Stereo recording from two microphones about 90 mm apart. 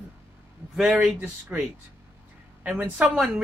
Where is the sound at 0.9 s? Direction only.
15° right (ahead or behind).